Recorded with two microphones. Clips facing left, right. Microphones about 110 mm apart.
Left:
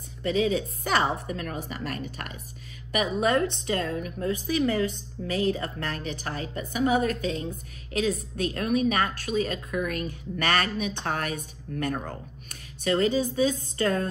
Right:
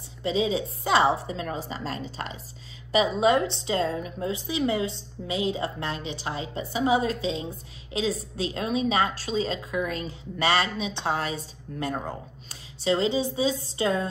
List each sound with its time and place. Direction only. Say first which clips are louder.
0.2 s a woman's voice: even; 20° right (ahead or behind)
3.2 s a woman's voice: right 2 dB; 20° right (ahead or behind)